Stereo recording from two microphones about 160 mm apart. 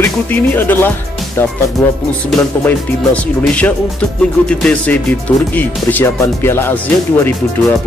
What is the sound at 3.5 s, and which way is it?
Speech, 5° left (ahead or behind).